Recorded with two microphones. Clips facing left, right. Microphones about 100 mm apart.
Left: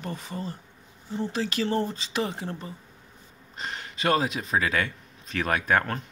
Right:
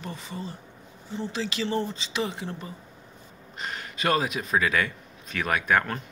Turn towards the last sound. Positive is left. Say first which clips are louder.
# even
turn(degrees=30)  # may be behind; listen again after turning